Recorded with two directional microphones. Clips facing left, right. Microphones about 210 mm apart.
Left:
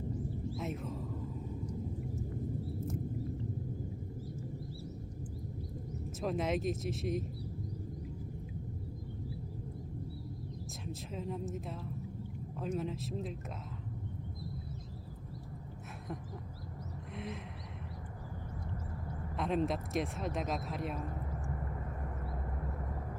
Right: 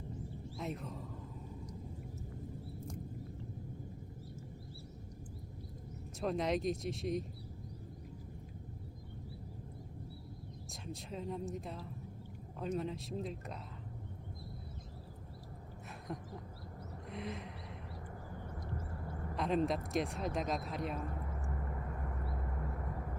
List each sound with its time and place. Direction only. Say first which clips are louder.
0.5 s music: right 1 dB; centre (ahead or behind)
6.1 s speech: even; centre (ahead or behind)
11.1 s speech: left 1 dB; centre (ahead or behind)
17.1 s a sound: even; centre (ahead or behind)
19.4 s speech: even; centre (ahead or behind)